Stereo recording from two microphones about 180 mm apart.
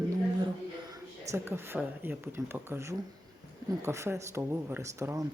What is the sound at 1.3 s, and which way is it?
Speech, 15° right (ahead or behind).